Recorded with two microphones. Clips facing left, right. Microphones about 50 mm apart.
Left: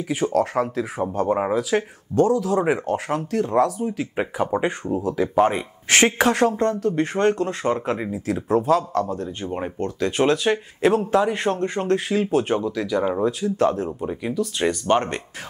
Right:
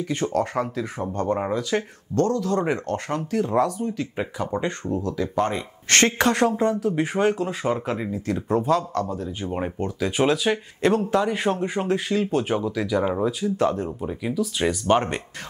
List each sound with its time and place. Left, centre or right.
0.1 s speech: centre
4.5 s speech: centre
5.1 s speech: left
5.9 s speech: centre